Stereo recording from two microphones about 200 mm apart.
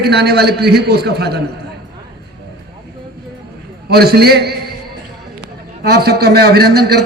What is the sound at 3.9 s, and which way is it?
Speech, 50° right (ahead or behind).